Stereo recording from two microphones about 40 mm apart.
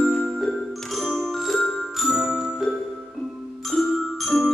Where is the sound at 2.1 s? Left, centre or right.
Centre.